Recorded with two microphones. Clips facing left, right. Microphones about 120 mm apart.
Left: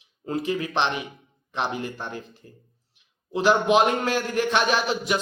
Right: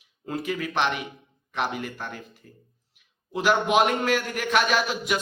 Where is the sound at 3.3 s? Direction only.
30° left (ahead or behind).